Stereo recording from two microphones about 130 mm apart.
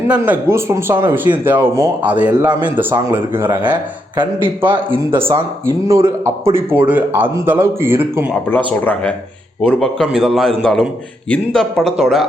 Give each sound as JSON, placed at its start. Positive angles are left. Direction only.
{"t": 0.1, "sound": "speech", "side_deg": -15}
{"t": 5.9, "sound": "speech", "side_deg": -20}
{"t": 8.4, "sound": "speech", "side_deg": 15}
{"t": 9.6, "sound": "a man's voice", "side_deg": 5}